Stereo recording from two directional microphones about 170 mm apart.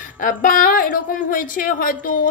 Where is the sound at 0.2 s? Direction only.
50° left (ahead or behind).